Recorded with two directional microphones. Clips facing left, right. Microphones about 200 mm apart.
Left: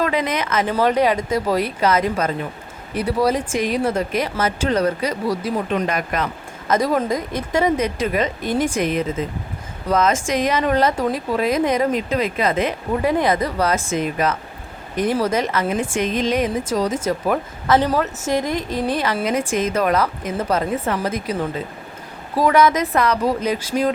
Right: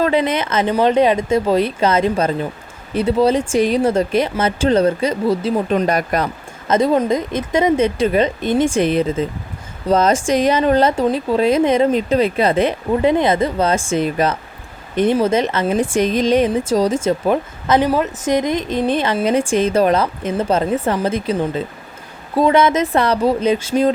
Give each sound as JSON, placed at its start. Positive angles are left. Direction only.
{"t": 0.0, "sound": "a woman's voice", "side_deg": -30}
{"t": 5.6, "sound": "speech", "side_deg": -35}
{"t": 6.7, "sound": "a woman's voice", "side_deg": -25}
{"t": 22.4, "sound": "a woman's voice", "side_deg": -25}